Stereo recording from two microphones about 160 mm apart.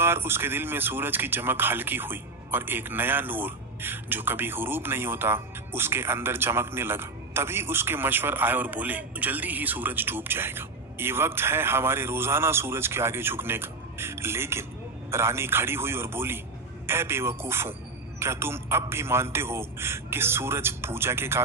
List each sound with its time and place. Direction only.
0.0 s speech: 15° right (ahead or behind)